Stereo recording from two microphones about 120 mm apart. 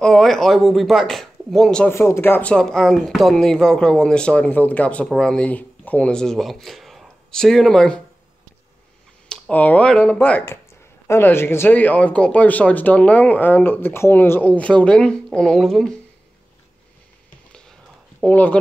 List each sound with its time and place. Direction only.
0.0 s speech: 5° left (ahead or behind)
1.9 s speech: 20° left (ahead or behind)
2.5 s speech: 5° left (ahead or behind)
9.3 s speech: 10° left (ahead or behind)
17.5 s a sound: 5° left (ahead or behind)
18.2 s speech: 10° left (ahead or behind)